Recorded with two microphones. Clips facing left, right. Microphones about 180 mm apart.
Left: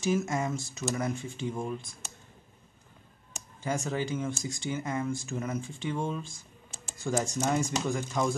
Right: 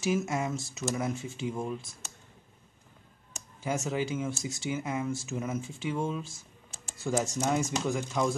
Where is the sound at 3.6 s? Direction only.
5° right (ahead or behind).